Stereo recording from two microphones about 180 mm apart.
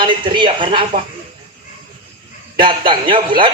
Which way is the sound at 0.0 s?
25° right (ahead or behind).